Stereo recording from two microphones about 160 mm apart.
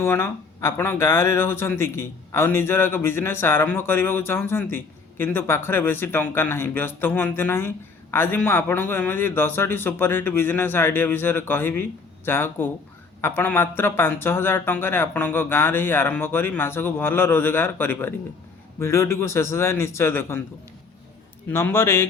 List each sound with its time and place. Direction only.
0.0 s speech: 15° left (ahead or behind)
21.5 s speech: 15° left (ahead or behind)